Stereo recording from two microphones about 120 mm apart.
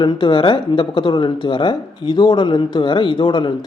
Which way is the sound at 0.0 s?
45° left (ahead or behind).